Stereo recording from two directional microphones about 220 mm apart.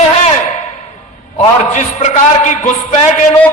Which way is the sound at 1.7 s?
30° left (ahead or behind).